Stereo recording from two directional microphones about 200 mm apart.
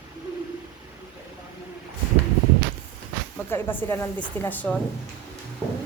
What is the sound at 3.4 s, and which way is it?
Speech, 10° left (ahead or behind).